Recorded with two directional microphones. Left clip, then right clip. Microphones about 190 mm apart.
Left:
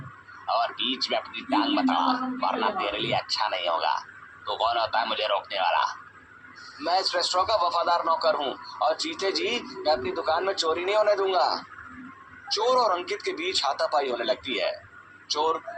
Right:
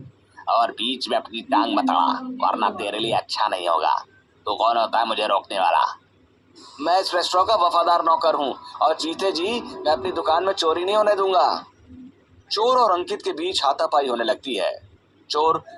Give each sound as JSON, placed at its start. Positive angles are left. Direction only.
{"t": 0.4, "sound": "speech", "side_deg": -50}